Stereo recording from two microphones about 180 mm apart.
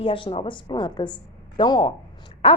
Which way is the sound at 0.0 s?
30° left (ahead or behind).